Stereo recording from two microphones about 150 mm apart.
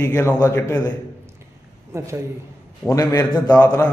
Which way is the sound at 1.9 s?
20° right (ahead or behind).